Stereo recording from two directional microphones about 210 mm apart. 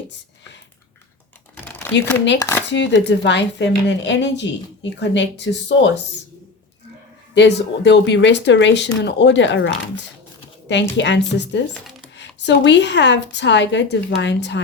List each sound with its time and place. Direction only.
1.6 s a sound: 10° left (ahead or behind)
2.4 s speech: 10° left (ahead or behind)
2.7 s a woman's voice: 60° left (ahead or behind)
7.3 s a woman's voice: 55° left (ahead or behind)